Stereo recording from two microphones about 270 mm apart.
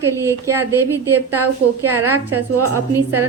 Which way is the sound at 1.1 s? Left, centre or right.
Right.